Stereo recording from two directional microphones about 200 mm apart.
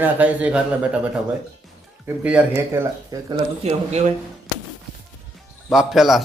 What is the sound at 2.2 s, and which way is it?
Speech, 5° right (ahead or behind).